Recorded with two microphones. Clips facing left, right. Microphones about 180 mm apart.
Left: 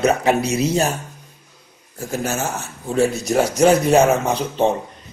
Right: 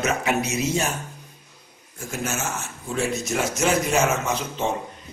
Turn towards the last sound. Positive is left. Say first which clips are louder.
# left 6 dB
turn(degrees=35)  # may be behind; listen again after turning